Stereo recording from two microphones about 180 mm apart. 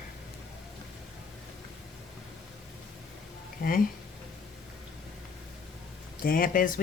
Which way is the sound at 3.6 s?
55° left (ahead or behind).